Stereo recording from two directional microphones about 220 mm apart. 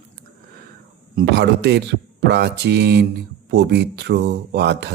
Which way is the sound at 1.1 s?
50° right (ahead or behind).